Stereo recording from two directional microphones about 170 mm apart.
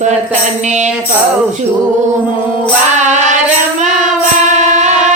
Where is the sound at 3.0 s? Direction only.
45° right (ahead or behind).